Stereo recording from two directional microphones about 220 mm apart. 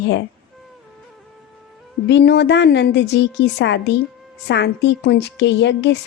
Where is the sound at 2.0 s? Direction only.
50° left (ahead or behind).